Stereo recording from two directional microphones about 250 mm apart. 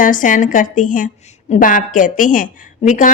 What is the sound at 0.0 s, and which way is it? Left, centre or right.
Speech, left.